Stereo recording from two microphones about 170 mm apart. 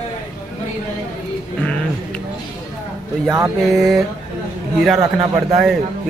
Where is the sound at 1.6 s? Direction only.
5° left (ahead or behind).